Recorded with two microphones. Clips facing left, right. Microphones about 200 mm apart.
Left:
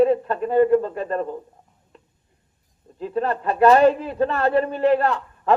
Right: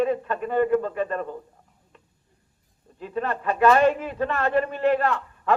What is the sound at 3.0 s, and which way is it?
A man's voice, 35° left (ahead or behind).